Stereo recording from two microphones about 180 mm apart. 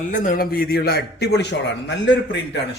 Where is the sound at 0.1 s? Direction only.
50° left (ahead or behind); by 2.6 s 70° left (ahead or behind).